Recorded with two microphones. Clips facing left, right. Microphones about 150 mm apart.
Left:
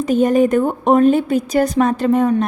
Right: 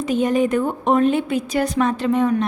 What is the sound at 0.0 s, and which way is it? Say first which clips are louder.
A woman's voice: left 5 dB; 45° left (ahead or behind).